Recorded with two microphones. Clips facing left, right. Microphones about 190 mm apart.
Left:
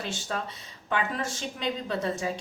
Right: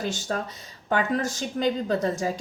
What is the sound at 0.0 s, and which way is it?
A woman's voice, 40° right (ahead or behind).